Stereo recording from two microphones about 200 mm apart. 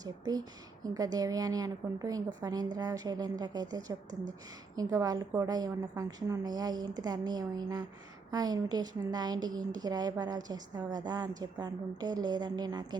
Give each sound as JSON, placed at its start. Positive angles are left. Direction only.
{"t": 0.0, "sound": "a woman's voice", "side_deg": -20}